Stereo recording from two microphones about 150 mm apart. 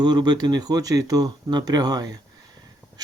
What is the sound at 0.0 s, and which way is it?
Speech, 30° right (ahead or behind).